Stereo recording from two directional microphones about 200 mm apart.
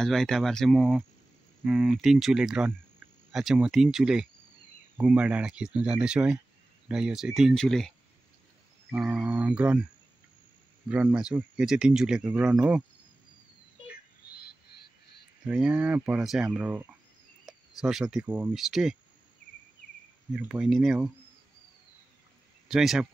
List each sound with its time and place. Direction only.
0.0 s speech: centre (ahead or behind)
8.9 s speech: centre (ahead or behind)
10.9 s speech: 10° right (ahead or behind)
14.2 s frog: 50° left (ahead or behind)
15.4 s speech: 5° right (ahead or behind)
20.3 s speech: 5° right (ahead or behind)
22.7 s speech: centre (ahead or behind)